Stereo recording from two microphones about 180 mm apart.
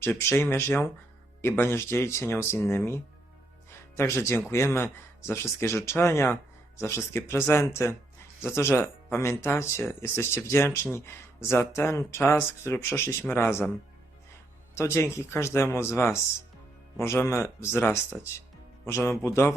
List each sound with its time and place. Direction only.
0.0 s speech: 10° left (ahead or behind)
14.8 s speech: 15° left (ahead or behind)